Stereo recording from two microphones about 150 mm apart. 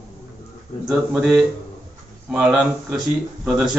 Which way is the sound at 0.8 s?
5° right (ahead or behind).